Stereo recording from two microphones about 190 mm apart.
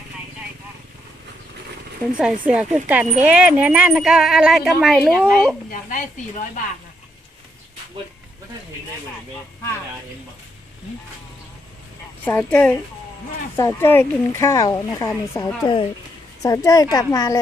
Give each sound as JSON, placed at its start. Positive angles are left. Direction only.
{"t": 2.1, "sound": "speech", "side_deg": -5}
{"t": 5.7, "sound": "speech", "side_deg": 45}
{"t": 12.2, "sound": "speech", "side_deg": 10}